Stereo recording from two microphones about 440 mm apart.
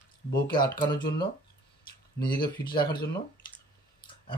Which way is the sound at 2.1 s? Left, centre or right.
Centre.